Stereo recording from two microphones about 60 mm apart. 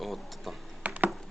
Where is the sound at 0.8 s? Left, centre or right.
Right.